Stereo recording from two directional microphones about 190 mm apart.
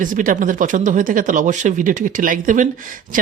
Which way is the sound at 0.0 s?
45° right (ahead or behind).